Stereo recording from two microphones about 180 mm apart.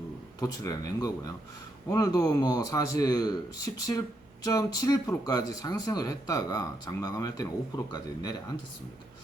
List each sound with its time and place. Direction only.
0.3 s speech: 20° left (ahead or behind)